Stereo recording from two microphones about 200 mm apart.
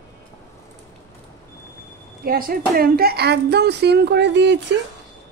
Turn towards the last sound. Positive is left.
turn(degrees=-60)  # may be behind; listen again after turning